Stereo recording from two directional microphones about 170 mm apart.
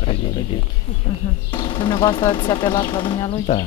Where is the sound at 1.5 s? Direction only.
30° left (ahead or behind).